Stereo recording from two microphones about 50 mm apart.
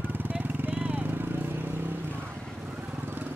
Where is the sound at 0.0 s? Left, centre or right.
Right.